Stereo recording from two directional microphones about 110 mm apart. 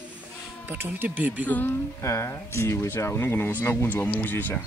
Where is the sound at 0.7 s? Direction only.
20° right (ahead or behind).